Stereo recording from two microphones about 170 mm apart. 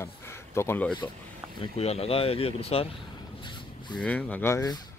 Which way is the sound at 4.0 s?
10° left (ahead or behind).